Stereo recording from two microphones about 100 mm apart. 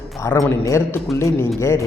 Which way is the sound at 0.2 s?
30° left (ahead or behind).